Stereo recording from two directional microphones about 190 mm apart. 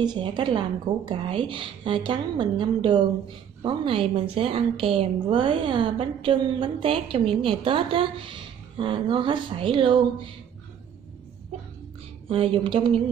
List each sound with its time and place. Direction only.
0.0 s a woman's voice: 25° right (ahead or behind)
11.5 s a sound: 30° right (ahead or behind)
12.3 s a woman's voice: 30° right (ahead or behind)